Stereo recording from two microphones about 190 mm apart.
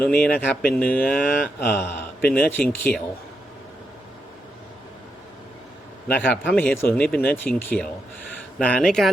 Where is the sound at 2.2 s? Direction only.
50° left (ahead or behind).